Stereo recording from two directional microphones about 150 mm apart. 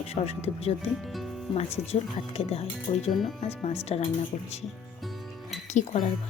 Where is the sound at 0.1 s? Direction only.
45° left (ahead or behind).